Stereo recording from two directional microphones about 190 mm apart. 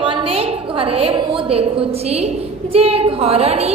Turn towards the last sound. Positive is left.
turn(degrees=-30)  # may be behind; listen again after turning